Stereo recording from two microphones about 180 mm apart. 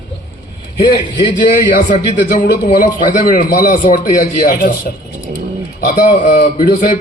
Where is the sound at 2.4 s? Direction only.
45° left (ahead or behind).